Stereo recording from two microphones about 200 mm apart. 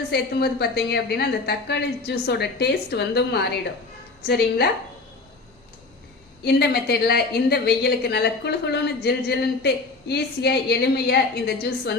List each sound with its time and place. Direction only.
0.1 s a woman's voice: 50° left (ahead or behind)
6.4 s a woman's voice: 55° left (ahead or behind)